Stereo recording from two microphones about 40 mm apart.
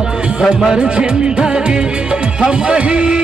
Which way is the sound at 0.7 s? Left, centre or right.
Right.